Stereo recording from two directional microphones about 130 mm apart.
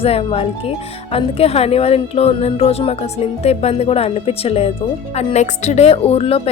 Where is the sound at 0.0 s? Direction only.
50° left (ahead or behind).